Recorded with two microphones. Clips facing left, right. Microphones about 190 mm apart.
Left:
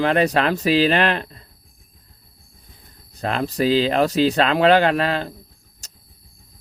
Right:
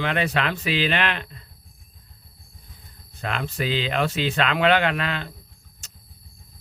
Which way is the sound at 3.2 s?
35° left (ahead or behind).